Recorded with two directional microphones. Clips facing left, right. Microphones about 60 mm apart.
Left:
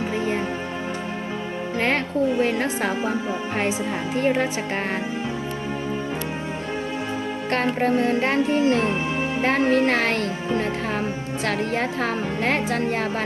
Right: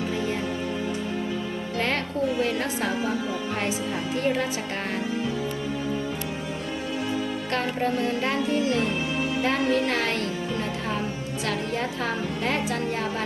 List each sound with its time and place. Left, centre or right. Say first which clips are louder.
2.4 s a woman's voice: left 4 dB; left
7.5 s a woman's voice: left 5 dB; left
7.9 s a woman's voice: left 5 dB; left